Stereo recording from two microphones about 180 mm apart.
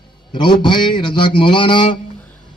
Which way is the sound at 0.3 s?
25° left (ahead or behind).